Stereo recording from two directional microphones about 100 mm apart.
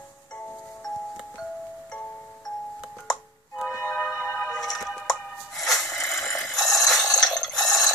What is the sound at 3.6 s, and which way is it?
Music, 15° left (ahead or behind).